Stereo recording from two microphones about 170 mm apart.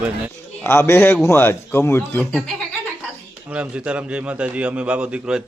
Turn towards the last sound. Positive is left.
turn(degrees=-5)  # may be behind; listen again after turning